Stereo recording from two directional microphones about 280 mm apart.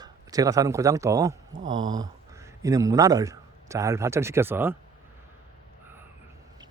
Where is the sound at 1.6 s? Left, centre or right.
Right.